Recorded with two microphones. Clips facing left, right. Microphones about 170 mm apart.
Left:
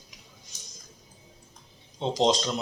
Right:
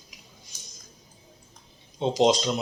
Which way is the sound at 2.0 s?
15° right (ahead or behind).